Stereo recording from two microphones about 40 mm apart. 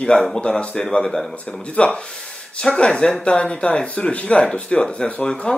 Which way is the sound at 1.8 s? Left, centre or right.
Left.